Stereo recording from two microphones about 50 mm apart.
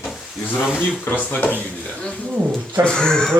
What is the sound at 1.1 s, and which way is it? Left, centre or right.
Speech, left.